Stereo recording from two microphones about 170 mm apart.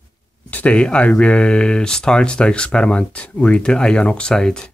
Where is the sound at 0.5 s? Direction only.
10° left (ahead or behind).